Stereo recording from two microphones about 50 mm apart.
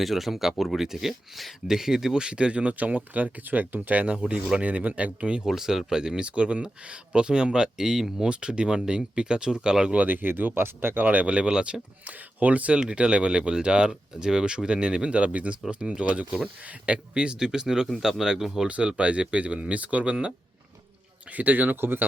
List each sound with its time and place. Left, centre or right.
0.0 s speech: centre
1.6 s speech: centre
5.5 s speech: centre
10.1 s speech: right; by 11.8 s centre
12.0 s speech: right; by 18.7 s centre
18.7 s speech: right
21.3 s speech: right